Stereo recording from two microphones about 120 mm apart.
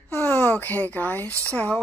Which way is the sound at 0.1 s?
15° left (ahead or behind).